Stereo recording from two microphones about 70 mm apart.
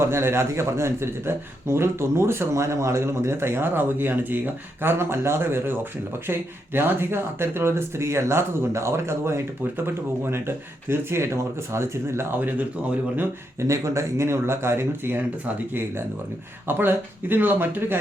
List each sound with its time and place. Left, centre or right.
0.0 s a man's voice: right
12.4 s speech: right
13.6 s a man's voice: right
16.6 s speech: right